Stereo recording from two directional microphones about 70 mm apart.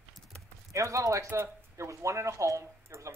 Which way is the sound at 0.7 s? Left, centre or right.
Right.